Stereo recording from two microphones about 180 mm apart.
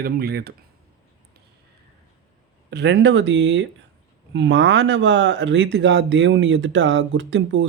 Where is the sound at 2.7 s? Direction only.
65° right (ahead or behind).